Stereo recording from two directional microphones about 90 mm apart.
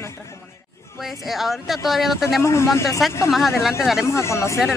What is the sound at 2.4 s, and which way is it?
Speech, 35° left (ahead or behind).